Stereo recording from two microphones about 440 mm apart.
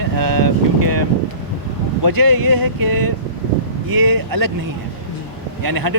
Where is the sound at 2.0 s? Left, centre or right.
Right.